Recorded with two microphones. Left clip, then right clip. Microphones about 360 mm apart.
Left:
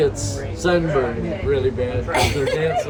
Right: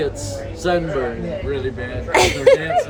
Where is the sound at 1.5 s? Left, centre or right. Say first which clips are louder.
Left 7 dB; centre.